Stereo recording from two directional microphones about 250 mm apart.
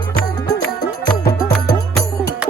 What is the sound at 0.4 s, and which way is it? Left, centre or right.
Music, centre.